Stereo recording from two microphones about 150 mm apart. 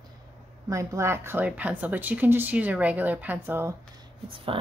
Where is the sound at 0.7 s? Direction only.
20° right (ahead or behind).